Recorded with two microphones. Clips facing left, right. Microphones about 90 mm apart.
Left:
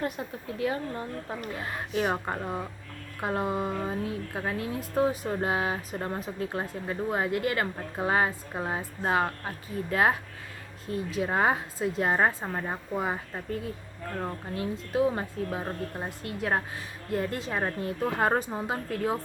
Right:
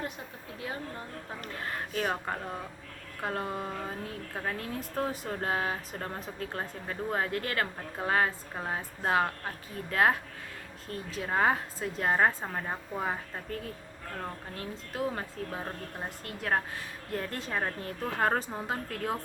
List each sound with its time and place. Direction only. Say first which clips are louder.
0.6 s speech: left 8 dB; 75° left (ahead or behind)
1.4 s speech: left 2 dB; 10° left (ahead or behind)